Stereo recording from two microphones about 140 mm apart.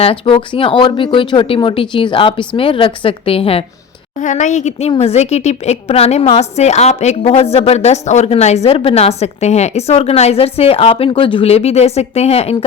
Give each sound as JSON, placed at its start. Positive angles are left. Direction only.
{"t": 0.0, "sound": "speech", "side_deg": 40}
{"t": 4.2, "sound": "a woman's voice", "side_deg": 60}